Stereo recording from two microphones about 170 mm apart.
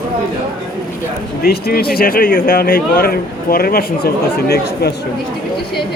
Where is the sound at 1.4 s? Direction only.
65° left (ahead or behind).